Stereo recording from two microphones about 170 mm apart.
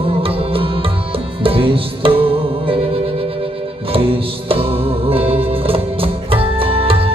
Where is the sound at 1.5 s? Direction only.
30° right (ahead or behind).